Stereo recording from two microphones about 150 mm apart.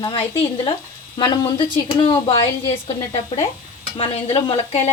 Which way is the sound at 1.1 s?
30° left (ahead or behind).